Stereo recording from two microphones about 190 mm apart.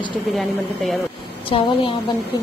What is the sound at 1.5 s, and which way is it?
Speech, 30° left (ahead or behind).